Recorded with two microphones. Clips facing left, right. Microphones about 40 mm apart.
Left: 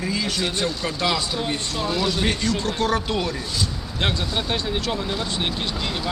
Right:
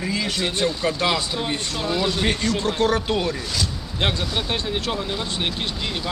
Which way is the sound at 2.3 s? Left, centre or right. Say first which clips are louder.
Right 1 dB; right.